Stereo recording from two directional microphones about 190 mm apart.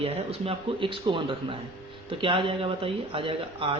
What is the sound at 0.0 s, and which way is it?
Speech, 30° right (ahead or behind).